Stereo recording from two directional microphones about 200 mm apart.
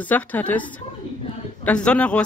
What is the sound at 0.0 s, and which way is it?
A man's voice, 10° left (ahead or behind).